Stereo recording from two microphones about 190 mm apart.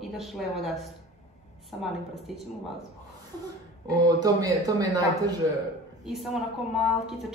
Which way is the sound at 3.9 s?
20° right (ahead or behind).